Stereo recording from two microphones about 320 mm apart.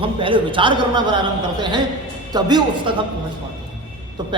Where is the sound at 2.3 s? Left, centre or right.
Centre.